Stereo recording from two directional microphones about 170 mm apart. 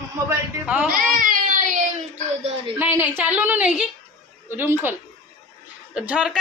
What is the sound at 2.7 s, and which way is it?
A woman's voice, 10° right (ahead or behind).